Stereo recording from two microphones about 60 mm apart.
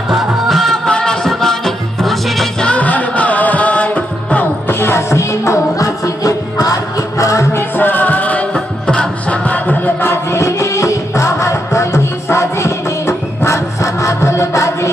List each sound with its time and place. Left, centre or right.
0.1 s music: centre
0.9 s music: centre
2.6 s music: left
4.7 s music: left
7.8 s music: left
10.1 s music: left